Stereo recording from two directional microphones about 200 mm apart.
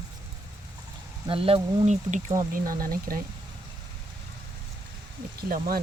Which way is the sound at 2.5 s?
45° right (ahead or behind).